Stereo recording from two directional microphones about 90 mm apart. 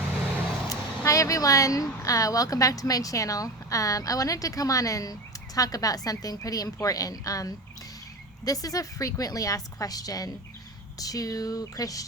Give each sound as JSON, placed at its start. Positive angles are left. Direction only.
{"t": 0.7, "sound": "a woman's voice", "side_deg": 35}